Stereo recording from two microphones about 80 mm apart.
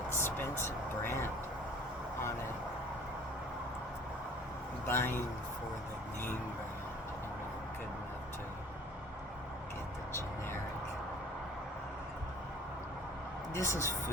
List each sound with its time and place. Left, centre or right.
0.1 s a sound: left
4.9 s a man's voice: left
13.5 s a woman's voice: left